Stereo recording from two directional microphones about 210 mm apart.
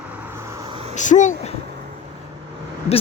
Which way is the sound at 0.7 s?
25° right (ahead or behind).